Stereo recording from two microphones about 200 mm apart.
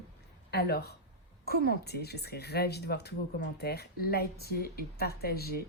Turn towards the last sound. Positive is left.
turn(degrees=50)  # may be behind; listen again after turning